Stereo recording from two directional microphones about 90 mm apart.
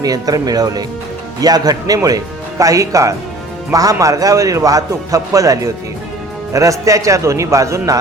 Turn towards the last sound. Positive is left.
turn(degrees=-40)  # may be behind; listen again after turning